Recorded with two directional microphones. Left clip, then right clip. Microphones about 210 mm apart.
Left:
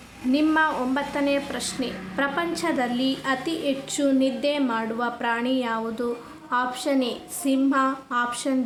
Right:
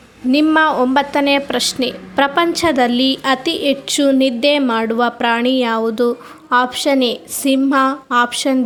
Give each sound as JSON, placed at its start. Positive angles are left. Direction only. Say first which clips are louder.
{"t": 0.3, "sound": "a woman's voice", "louder": "right 8 dB", "side_deg": -40}